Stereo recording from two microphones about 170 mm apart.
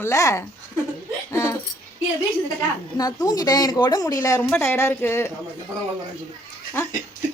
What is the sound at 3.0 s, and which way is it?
A woman's voice, 20° left (ahead or behind).